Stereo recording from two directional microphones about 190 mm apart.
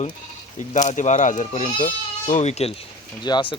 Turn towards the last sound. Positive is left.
turn(degrees=25)  # may be behind; listen again after turning